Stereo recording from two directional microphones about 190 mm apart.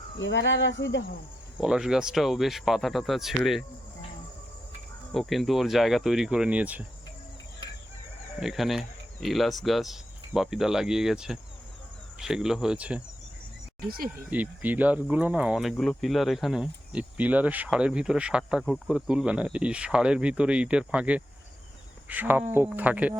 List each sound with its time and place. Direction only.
0.2 s speech: 70° left (ahead or behind)
1.5 s speech: 5° right (ahead or behind)
5.1 s speech: centre (ahead or behind)
8.4 s speech: centre (ahead or behind)
14.3 s speech: 10° right (ahead or behind)